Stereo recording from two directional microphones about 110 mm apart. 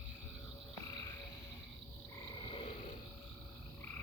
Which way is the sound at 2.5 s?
60° left (ahead or behind).